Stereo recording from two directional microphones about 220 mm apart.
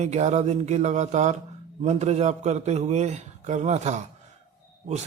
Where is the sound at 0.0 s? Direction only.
30° right (ahead or behind).